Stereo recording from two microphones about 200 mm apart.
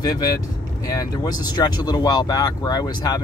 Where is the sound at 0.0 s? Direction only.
20° left (ahead or behind).